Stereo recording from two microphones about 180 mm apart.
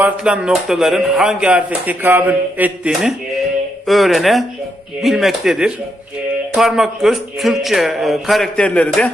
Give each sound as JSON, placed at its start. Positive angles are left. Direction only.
{"t": 0.0, "sound": "speech", "side_deg": -5}